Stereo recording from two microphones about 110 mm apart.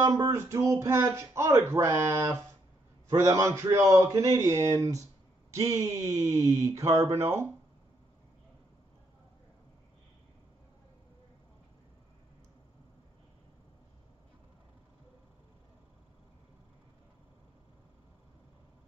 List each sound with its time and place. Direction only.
0.0 s speech: 30° right (ahead or behind)